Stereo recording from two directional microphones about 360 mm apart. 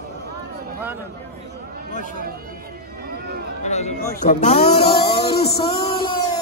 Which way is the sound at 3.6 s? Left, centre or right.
Centre.